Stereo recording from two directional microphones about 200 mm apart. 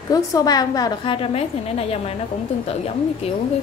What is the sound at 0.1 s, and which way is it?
A woman's voice, 20° left (ahead or behind).